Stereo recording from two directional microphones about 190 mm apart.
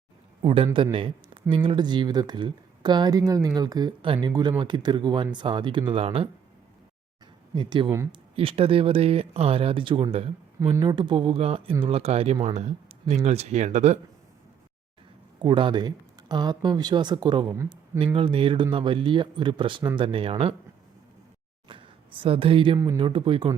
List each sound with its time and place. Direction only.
0.4 s speech: 30° right (ahead or behind)
7.5 s speech: 25° right (ahead or behind)
8.4 s speech: 30° right (ahead or behind)
15.4 s speech: 25° right (ahead or behind)
21.7 s speech: 25° right (ahead or behind)